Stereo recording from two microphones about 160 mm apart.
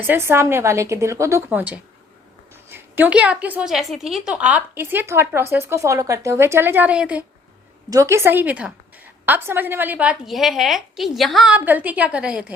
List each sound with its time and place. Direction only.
0.1 s a woman's voice: 15° right (ahead or behind)
7.9 s a woman's voice: 20° right (ahead or behind)